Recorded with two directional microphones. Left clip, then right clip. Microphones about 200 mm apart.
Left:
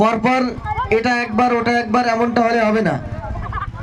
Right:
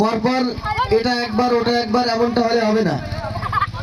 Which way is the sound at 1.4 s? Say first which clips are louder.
Even; 40° left (ahead or behind).